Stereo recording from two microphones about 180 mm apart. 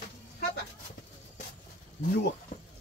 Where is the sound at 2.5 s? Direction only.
45° left (ahead or behind).